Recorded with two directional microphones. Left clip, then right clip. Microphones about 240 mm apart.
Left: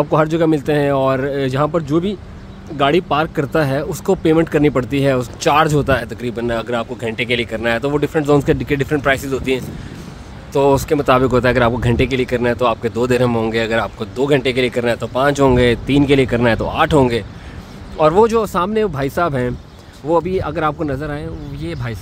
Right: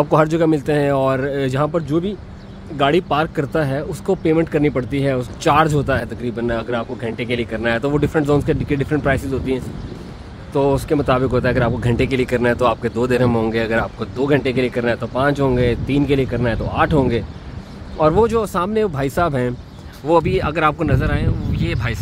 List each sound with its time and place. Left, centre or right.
0.0 s speech: centre